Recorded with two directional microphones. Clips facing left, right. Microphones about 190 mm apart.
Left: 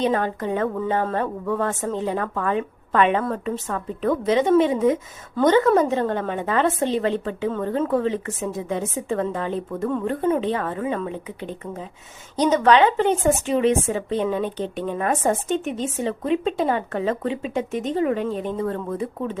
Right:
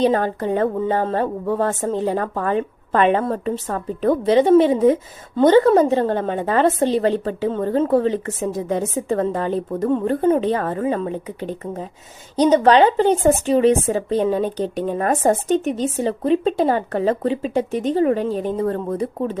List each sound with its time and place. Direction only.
0.0 s a woman's voice: 35° right (ahead or behind)